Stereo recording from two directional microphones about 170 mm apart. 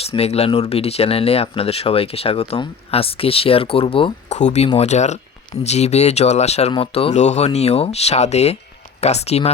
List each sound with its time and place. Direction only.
0.0 s speech: 35° left (ahead or behind)